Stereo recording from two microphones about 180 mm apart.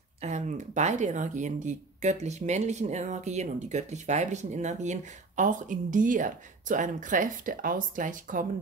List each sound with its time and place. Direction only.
0.2 s speech: 40° right (ahead or behind)